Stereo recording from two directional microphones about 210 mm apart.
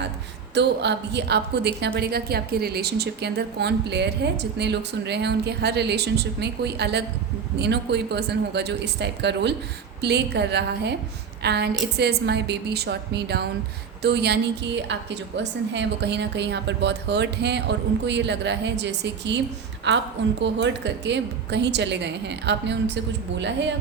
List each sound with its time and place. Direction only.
0.5 s a woman's voice: 55° right (ahead or behind)